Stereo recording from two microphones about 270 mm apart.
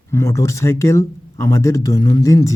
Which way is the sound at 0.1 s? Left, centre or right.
Centre.